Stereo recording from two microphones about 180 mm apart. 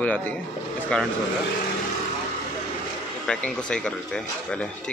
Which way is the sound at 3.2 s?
5° left (ahead or behind).